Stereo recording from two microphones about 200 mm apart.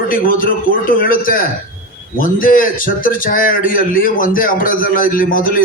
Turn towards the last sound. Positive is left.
turn(degrees=45)  # may be behind; listen again after turning